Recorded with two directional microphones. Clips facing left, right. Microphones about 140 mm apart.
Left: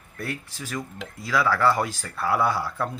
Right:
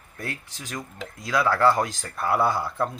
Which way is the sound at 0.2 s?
15° right (ahead or behind).